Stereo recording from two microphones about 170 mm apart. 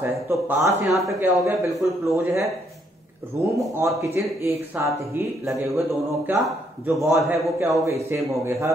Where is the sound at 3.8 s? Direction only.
15° right (ahead or behind).